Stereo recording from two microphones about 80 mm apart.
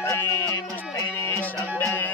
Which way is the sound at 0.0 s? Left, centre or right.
Left.